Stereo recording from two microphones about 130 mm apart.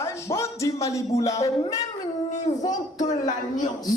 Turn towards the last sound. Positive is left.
turn(degrees=30)  # may be behind; listen again after turning